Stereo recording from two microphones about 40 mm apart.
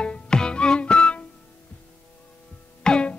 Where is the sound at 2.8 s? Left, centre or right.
Left.